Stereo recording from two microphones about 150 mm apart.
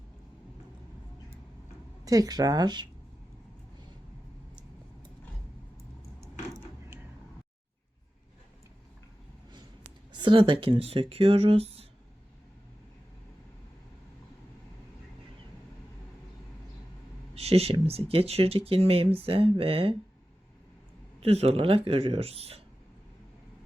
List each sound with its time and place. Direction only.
2.0 s speech: 25° right (ahead or behind)
10.1 s speech: 35° right (ahead or behind)
17.3 s speech: 40° right (ahead or behind)
21.2 s speech: 45° right (ahead or behind)